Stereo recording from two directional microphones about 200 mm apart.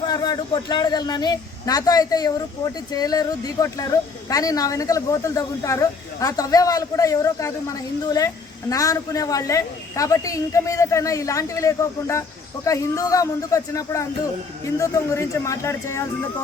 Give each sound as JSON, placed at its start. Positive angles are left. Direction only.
{"t": 0.1, "sound": "speech", "side_deg": 20}